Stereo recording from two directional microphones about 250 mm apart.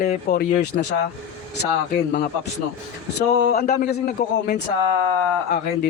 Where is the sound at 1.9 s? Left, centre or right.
Left.